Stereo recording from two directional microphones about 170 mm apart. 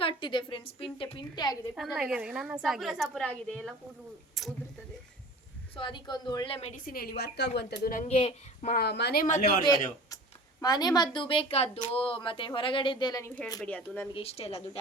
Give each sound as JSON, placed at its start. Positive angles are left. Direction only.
{"t": 0.0, "sound": "a woman's voice", "side_deg": 30}
{"t": 1.7, "sound": "a woman's voice", "side_deg": -5}
{"t": 5.7, "sound": "a woman's voice", "side_deg": 30}
{"t": 6.8, "sound": "a woman's voice", "side_deg": 60}
{"t": 7.9, "sound": "a woman's voice", "side_deg": 40}
{"t": 8.7, "sound": "a woman's voice", "side_deg": 70}
{"t": 10.6, "sound": "a woman's voice", "side_deg": 25}
{"t": 13.6, "sound": "speech", "side_deg": 5}
{"t": 14.1, "sound": "a woman's voice", "side_deg": 35}